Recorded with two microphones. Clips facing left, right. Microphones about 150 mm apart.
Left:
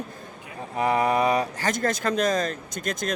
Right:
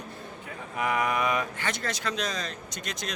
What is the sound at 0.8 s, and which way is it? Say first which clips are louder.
Speech: left 5 dB; 35° left (ahead or behind).